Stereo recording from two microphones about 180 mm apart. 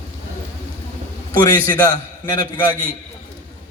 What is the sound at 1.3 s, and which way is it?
A man's voice, 20° left (ahead or behind).